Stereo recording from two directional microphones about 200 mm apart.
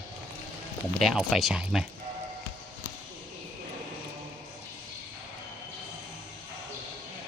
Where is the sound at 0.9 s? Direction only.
Centre (ahead or behind).